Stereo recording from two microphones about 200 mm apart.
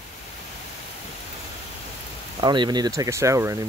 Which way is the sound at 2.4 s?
20° right (ahead or behind).